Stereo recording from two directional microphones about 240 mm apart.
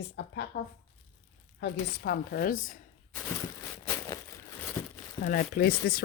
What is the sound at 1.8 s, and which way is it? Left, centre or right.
Speech, left.